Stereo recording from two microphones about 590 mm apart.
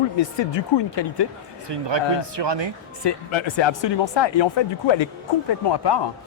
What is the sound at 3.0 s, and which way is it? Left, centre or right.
Speech, left.